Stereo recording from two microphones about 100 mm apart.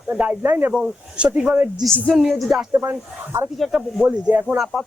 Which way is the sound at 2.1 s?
Centre (ahead or behind).